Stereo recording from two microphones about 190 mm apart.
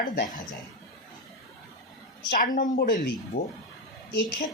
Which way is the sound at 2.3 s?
45° left (ahead or behind).